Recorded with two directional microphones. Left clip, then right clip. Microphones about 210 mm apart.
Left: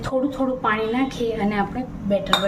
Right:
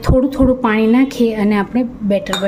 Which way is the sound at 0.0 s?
45° right (ahead or behind).